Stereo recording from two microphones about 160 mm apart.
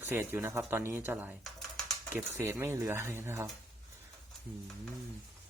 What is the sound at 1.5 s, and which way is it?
Typing, centre (ahead or behind).